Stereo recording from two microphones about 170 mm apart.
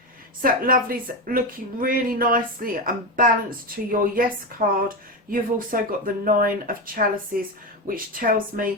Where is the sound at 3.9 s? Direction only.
55° right (ahead or behind).